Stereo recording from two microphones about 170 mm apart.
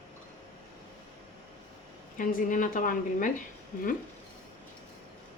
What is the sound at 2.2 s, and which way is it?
A woman's voice, 50° left (ahead or behind).